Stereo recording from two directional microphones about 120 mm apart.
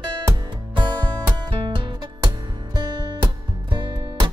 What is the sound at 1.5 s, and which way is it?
Music, 45° right (ahead or behind).